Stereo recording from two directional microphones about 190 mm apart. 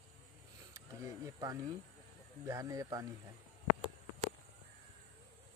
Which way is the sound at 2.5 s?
15° right (ahead or behind).